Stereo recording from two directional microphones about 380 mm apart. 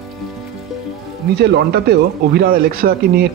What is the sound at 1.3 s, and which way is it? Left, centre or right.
Speech, right.